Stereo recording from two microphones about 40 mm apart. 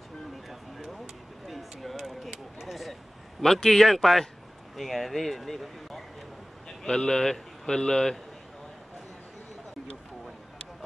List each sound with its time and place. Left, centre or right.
0.9 s a sound: centre
3.5 s speech: centre
6.8 s speech: centre